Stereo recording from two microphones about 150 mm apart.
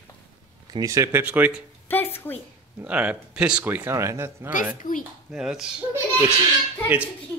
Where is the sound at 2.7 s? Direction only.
10° right (ahead or behind).